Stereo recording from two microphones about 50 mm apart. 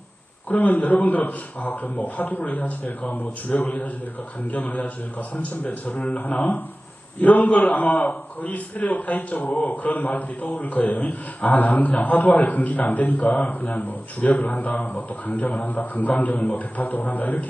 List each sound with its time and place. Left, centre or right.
0.4 s a man's voice: left